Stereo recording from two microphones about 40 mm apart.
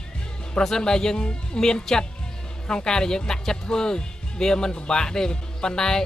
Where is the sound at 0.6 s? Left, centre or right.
Centre.